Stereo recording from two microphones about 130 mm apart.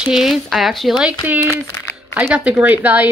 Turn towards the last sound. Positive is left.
turn(degrees=-10)  # may be behind; listen again after turning